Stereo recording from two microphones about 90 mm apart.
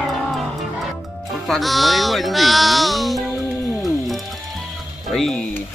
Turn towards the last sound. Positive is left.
turn(degrees=5)  # may be behind; listen again after turning